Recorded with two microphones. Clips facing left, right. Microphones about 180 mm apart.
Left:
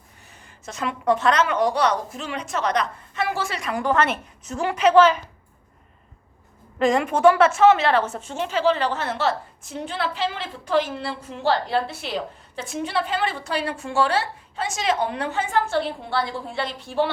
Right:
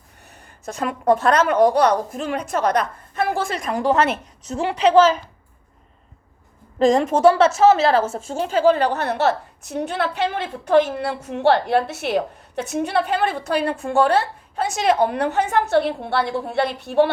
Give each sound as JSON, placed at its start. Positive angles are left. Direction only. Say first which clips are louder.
{"t": 0.8, "sound": "a woman's voice", "louder": "right 3 dB", "side_deg": -50}
{"t": 6.7, "sound": "a woman's voice", "louder": "right 4 dB", "side_deg": -40}
{"t": 10.0, "sound": "a woman's voice", "louder": "right 2 dB", "side_deg": -55}